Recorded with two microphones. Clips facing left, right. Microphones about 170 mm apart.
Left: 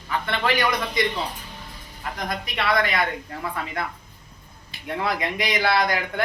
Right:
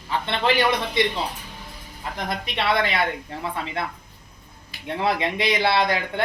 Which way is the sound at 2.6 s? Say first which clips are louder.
Even; 25° right (ahead or behind).